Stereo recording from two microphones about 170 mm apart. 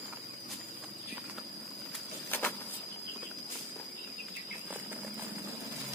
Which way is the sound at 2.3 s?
10° left (ahead or behind).